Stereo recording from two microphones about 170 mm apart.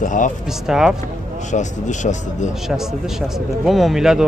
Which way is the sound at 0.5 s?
5° right (ahead or behind).